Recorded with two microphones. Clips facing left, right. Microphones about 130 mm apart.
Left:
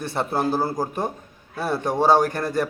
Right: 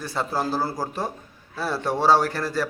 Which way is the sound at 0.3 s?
20° left (ahead or behind).